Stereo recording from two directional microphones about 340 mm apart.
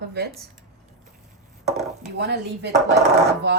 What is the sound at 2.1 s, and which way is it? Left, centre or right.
A woman's voice, right.